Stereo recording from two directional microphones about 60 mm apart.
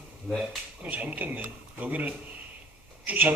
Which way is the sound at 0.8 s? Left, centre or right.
Right.